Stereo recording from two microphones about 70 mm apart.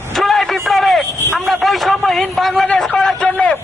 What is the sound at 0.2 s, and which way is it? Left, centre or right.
Vehicle, centre.